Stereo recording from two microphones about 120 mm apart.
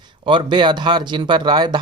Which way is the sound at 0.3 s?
40° right (ahead or behind).